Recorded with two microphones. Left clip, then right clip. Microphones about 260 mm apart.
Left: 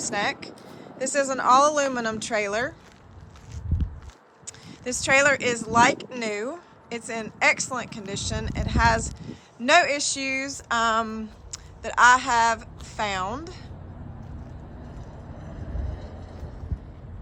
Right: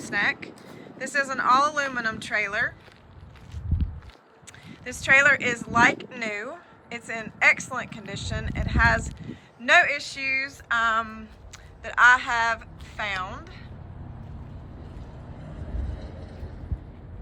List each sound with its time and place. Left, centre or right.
0.0 s speech: centre
4.4 s speech: centre
15.9 s vehicle: left